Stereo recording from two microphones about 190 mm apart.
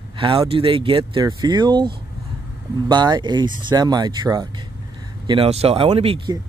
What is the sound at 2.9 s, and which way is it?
Speech, 25° right (ahead or behind).